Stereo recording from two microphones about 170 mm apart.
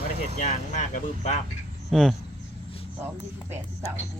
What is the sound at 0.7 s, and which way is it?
Speech, 45° left (ahead or behind).